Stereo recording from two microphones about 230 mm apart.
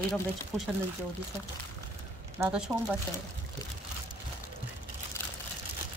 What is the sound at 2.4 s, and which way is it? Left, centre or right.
Speech, centre.